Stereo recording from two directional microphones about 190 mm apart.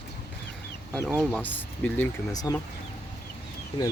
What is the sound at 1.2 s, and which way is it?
Speech, 10° left (ahead or behind).